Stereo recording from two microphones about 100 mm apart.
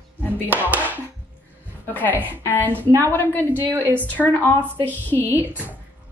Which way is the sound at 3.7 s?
20° right (ahead or behind).